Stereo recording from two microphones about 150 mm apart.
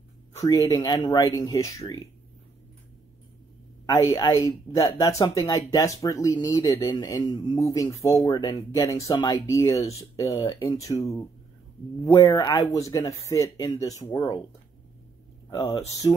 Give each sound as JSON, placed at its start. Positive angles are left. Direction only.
{"t": 0.4, "sound": "speech", "side_deg": 20}
{"t": 3.8, "sound": "speech", "side_deg": 20}
{"t": 15.6, "sound": "speech", "side_deg": 35}